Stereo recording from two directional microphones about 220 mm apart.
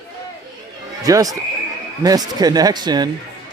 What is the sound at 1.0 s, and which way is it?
Speech, 15° right (ahead or behind).